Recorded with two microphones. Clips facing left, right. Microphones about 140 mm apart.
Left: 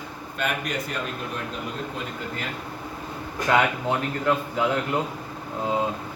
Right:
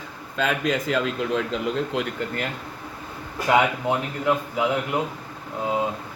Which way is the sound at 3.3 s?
10° right (ahead or behind).